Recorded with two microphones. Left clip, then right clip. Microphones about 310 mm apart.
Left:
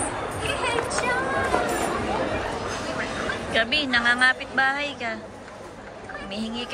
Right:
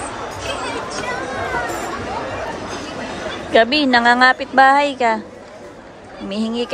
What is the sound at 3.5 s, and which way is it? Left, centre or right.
A woman's voice, centre.